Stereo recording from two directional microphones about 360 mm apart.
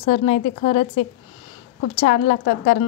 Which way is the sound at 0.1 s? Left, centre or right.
Centre.